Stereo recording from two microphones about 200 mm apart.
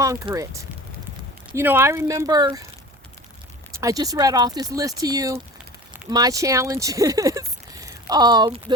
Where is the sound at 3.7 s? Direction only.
15° right (ahead or behind).